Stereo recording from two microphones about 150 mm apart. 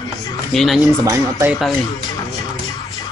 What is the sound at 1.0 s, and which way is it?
Speech, 20° right (ahead or behind).